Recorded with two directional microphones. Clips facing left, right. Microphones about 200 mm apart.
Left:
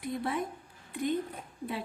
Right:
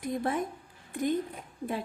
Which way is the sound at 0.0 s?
45° right (ahead or behind).